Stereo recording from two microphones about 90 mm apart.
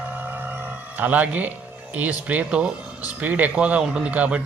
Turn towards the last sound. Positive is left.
turn(degrees=-15)  # may be behind; listen again after turning